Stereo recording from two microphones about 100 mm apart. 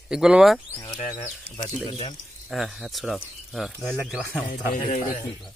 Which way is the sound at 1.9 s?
60° left (ahead or behind).